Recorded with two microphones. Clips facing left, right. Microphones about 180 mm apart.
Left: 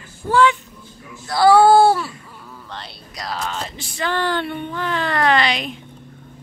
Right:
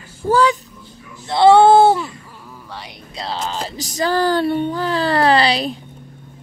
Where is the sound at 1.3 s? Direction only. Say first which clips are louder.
Right 2 dB; 25° right (ahead or behind).